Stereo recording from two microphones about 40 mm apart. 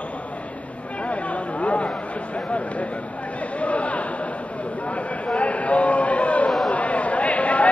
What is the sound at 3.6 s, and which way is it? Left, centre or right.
Chatter, left.